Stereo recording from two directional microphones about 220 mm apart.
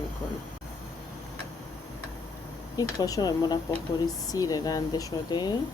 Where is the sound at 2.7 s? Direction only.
15° left (ahead or behind).